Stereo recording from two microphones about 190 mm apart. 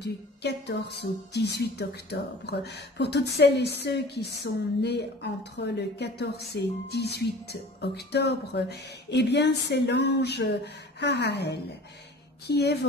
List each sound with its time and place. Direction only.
0.0 s speech: 60° left (ahead or behind)